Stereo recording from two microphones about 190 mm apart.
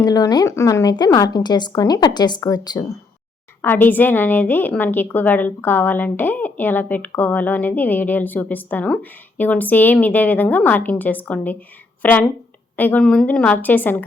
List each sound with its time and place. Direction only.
0.0 s a woman's voice: 20° left (ahead or behind)